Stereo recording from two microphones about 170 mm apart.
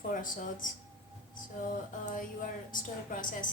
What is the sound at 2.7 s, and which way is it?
Speech, 50° left (ahead or behind).